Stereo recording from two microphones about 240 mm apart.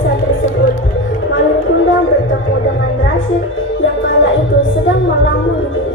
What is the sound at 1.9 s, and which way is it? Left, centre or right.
Music, left.